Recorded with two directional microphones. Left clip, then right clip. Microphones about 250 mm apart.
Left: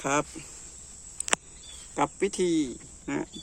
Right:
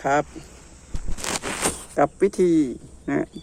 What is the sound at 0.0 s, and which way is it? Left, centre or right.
Speech, left.